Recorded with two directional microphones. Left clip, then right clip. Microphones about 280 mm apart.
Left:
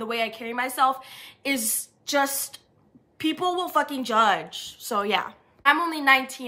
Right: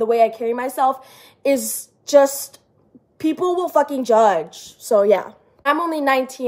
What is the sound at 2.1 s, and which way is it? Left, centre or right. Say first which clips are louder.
Speech: right 10 dB; left.